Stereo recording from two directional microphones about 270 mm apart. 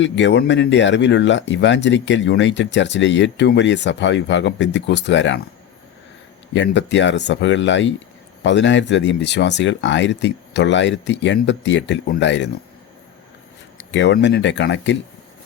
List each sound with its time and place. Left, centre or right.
0.0 s speech: left
6.5 s speech: left
13.7 s speech: left